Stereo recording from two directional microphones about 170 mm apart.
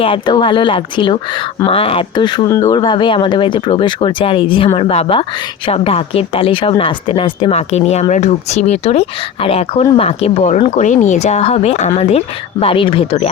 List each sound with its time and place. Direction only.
0.0 s speech: 30° left (ahead or behind)